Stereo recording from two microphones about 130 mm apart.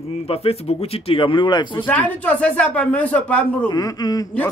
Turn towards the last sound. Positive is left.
turn(degrees=30)  # may be behind; listen again after turning